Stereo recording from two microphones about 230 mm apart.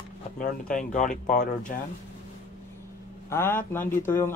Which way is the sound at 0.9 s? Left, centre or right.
Left.